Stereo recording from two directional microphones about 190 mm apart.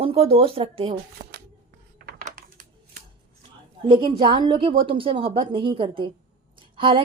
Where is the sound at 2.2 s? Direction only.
50° right (ahead or behind).